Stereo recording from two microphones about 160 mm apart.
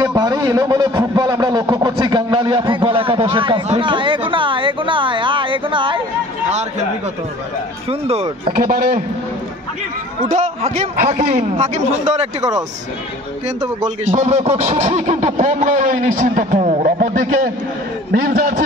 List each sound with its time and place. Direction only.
0.0 s a man's voice: 25° right (ahead or behind)
7.9 s a man's voice: 40° right (ahead or behind)
8.5 s speech: 65° right (ahead or behind)
10.2 s speech: 40° right (ahead or behind)
13.8 s speech: 45° right (ahead or behind)
16.5 s a man's voice: 40° right (ahead or behind)
16.8 s speech: 60° right (ahead or behind)